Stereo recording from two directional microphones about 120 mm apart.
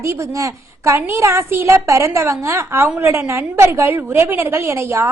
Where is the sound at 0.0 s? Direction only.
25° right (ahead or behind).